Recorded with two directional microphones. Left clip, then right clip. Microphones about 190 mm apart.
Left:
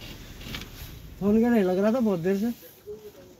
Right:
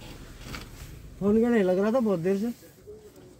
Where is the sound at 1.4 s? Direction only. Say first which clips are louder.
Even; 15° right (ahead or behind).